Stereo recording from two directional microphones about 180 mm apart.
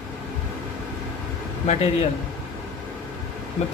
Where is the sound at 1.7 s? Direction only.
35° left (ahead or behind).